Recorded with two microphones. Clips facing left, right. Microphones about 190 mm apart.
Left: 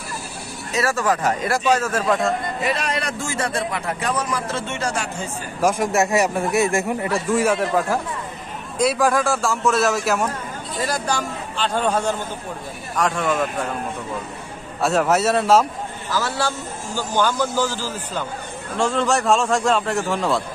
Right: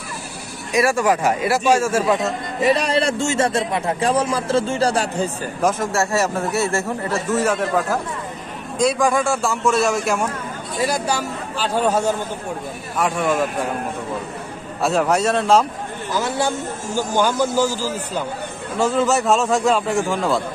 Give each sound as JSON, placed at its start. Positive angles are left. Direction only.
{"t": 0.7, "sound": "a man's voice", "side_deg": -15}
{"t": 2.7, "sound": "a man's voice", "side_deg": -30}
{"t": 5.6, "sound": "a man's voice", "side_deg": 10}
{"t": 10.8, "sound": "a man's voice", "side_deg": -10}
{"t": 14.8, "sound": "a man's voice", "side_deg": 0}
{"t": 16.1, "sound": "a man's voice", "side_deg": -20}
{"t": 18.8, "sound": "a man's voice", "side_deg": -5}